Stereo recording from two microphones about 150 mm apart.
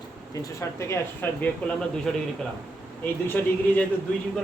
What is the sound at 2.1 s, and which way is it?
Speech, centre (ahead or behind).